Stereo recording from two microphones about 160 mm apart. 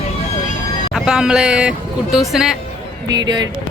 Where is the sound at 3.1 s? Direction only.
25° right (ahead or behind).